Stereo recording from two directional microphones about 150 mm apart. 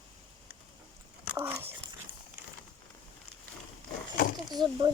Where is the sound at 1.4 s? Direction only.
15° right (ahead or behind).